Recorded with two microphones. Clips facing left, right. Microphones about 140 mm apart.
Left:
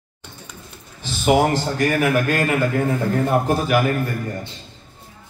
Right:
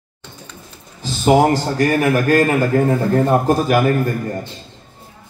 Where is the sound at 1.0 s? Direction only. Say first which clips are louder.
Right 4 dB; 40° right (ahead or behind).